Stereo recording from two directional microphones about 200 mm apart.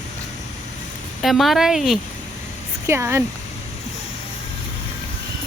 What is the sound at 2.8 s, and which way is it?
Speech, 15° right (ahead or behind).